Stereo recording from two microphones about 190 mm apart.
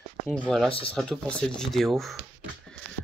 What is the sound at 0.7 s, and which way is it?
Speech, 30° left (ahead or behind).